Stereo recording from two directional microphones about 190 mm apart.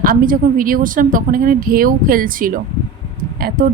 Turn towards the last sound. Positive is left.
turn(degrees=-50)  # may be behind; listen again after turning